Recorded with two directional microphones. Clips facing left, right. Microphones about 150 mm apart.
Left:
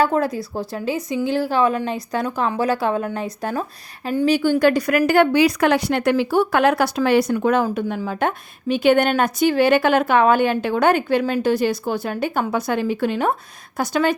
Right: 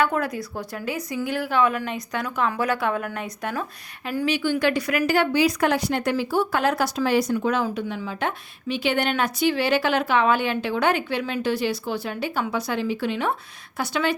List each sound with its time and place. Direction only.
0.0 s a woman's voice: 30° left (ahead or behind); by 14.2 s 45° left (ahead or behind)